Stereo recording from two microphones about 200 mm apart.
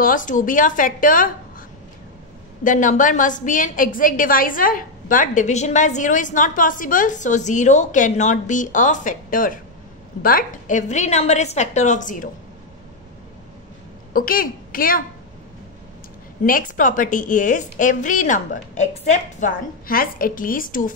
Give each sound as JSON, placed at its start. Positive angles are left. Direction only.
{"t": 0.0, "sound": "a woman's voice", "side_deg": 40}
{"t": 2.6, "sound": "a woman's voice", "side_deg": 40}
{"t": 14.1, "sound": "a woman's voice", "side_deg": 45}
{"t": 16.4, "sound": "a woman's voice", "side_deg": 45}